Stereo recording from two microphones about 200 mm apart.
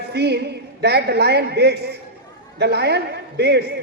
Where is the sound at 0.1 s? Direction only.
55° right (ahead or behind).